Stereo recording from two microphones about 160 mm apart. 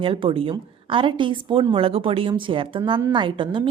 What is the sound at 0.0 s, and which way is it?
A woman's voice, 30° right (ahead or behind).